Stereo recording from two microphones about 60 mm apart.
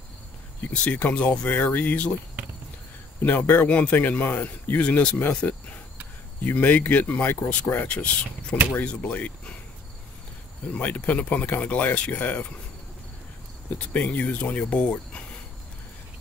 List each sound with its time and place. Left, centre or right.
0.8 s speech: left
3.3 s speech: left
5.4 s cricket: left
6.4 s speech: left
7.9 s speech: centre
10.7 s speech: left
13.9 s speech: left